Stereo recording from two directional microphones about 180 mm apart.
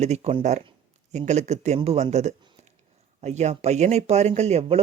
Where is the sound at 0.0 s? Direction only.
35° right (ahead or behind).